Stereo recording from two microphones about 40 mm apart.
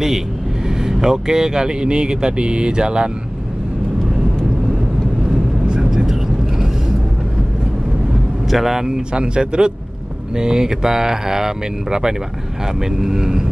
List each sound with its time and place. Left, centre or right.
0.7 s speech: centre
5.7 s vehicle: centre
8.5 s speech: centre